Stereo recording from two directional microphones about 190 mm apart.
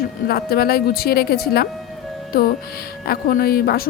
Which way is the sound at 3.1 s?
50° left (ahead or behind).